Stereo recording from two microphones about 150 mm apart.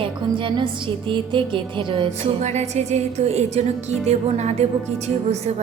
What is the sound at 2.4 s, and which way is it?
Music, 50° right (ahead or behind).